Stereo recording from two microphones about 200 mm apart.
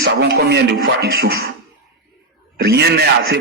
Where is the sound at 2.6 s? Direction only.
55° right (ahead or behind).